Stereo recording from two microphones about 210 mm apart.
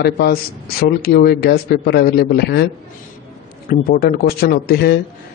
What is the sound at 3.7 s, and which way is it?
A man's voice, 45° left (ahead or behind).